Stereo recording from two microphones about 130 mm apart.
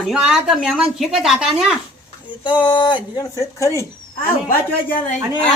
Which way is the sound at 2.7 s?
35° left (ahead or behind).